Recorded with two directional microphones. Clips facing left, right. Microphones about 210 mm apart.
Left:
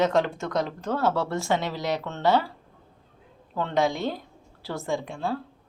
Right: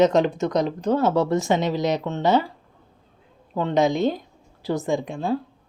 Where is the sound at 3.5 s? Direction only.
15° right (ahead or behind).